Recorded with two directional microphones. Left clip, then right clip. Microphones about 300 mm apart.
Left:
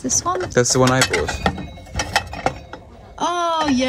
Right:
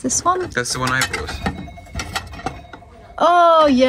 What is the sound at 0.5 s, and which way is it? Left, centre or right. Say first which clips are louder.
Dishes: left 4 dB; left.